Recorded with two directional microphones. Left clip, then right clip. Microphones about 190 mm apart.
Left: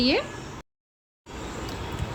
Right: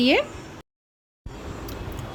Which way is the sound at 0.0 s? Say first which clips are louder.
Right 4 dB; 35° right (ahead or behind).